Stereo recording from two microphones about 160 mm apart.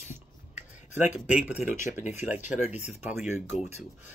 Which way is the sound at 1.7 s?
55° left (ahead or behind).